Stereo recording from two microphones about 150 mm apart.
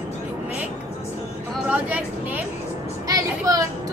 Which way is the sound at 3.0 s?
25° right (ahead or behind).